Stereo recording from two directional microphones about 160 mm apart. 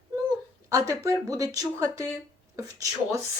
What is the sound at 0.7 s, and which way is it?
Speech, 20° right (ahead or behind).